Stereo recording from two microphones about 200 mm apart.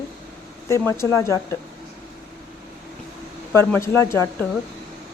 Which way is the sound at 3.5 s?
10° left (ahead or behind).